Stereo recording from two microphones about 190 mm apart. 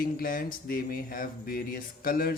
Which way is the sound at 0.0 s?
50° left (ahead or behind).